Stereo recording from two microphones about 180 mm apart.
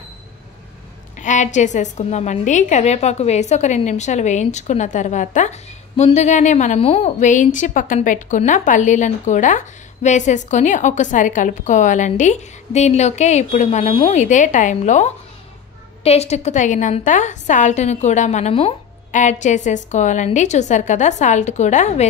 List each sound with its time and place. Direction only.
1.1 s a woman's voice: 40° left (ahead or behind)